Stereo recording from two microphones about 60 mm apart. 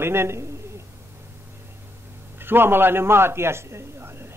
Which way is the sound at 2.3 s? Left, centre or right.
Right.